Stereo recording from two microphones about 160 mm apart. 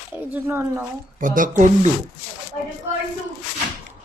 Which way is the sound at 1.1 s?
55° right (ahead or behind).